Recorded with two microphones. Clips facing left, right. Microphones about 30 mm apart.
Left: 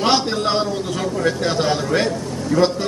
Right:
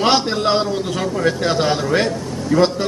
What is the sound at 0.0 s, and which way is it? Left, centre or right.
Speech, centre.